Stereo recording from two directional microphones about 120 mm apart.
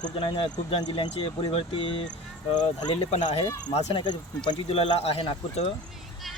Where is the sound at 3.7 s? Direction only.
60° left (ahead or behind).